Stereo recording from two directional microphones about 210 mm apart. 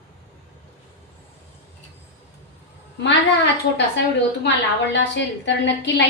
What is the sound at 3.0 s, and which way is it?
A woman's voice, 55° left (ahead or behind).